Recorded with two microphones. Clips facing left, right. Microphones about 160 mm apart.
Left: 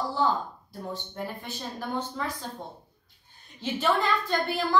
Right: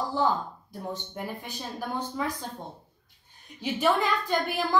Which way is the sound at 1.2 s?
10° right (ahead or behind).